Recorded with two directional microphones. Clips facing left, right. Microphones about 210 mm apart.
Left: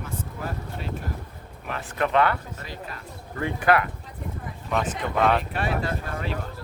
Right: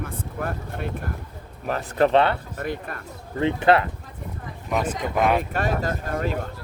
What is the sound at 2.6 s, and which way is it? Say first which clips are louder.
Speech: right 8 dB; 55° right (ahead or behind).